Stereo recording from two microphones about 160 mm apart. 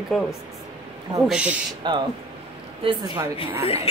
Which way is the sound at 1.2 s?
5° right (ahead or behind).